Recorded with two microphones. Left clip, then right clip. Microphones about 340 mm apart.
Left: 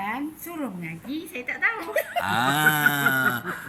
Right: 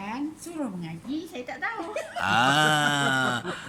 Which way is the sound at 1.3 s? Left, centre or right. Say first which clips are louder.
Left 10 dB; centre.